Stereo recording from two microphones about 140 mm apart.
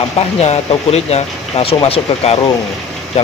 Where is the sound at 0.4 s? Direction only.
45° left (ahead or behind).